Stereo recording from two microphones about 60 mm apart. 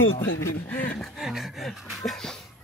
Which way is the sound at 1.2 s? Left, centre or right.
Centre.